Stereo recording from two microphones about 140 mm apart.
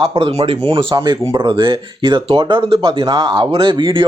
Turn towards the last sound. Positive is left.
turn(degrees=-35)  # may be behind; listen again after turning